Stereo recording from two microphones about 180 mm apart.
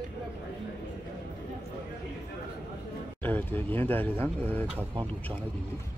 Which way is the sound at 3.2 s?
10° left (ahead or behind).